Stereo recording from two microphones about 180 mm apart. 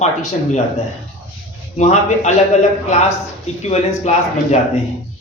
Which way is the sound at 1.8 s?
40° left (ahead or behind).